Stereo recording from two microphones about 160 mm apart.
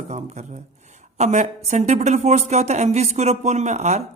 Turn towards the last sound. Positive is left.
turn(degrees=-45)  # may be behind; listen again after turning